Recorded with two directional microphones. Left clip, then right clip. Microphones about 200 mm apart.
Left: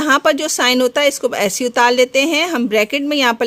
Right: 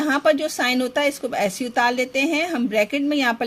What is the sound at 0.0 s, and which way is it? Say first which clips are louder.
Speech: left 5 dB; 35° left (ahead or behind).